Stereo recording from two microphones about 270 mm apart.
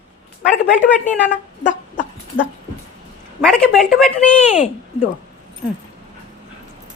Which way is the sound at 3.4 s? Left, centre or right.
Centre.